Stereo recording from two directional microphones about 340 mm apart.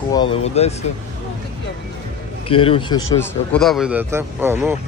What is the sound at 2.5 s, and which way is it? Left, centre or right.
A man's voice, centre.